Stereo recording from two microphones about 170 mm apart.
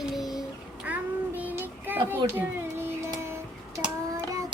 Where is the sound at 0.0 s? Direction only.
Centre (ahead or behind).